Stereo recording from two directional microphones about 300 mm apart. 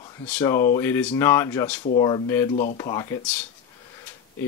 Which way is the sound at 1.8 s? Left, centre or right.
Centre.